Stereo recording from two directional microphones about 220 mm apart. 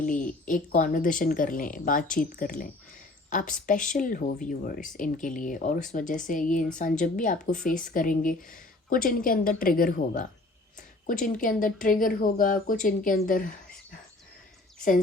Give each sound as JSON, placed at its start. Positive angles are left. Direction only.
{"t": 0.0, "sound": "speech", "side_deg": 35}